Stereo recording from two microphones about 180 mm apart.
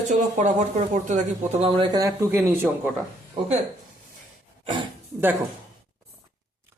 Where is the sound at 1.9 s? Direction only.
15° right (ahead or behind).